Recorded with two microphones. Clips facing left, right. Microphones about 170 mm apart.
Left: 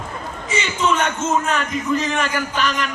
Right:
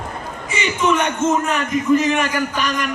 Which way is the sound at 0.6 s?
15° right (ahead or behind).